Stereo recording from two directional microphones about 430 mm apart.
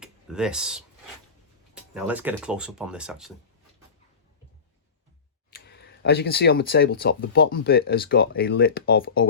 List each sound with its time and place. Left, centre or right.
0.0 s speech: centre
5.5 s speech: left